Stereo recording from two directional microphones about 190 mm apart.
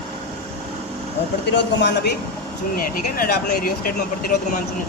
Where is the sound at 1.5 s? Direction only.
65° left (ahead or behind).